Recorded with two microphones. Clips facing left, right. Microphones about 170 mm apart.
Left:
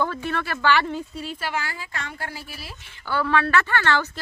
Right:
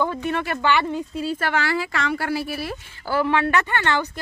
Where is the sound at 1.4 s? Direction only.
70° right (ahead or behind).